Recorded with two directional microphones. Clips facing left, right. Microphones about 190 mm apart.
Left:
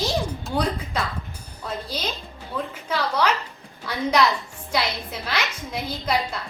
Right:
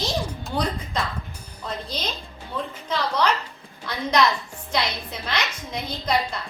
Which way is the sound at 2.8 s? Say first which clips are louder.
Even; 10° left (ahead or behind).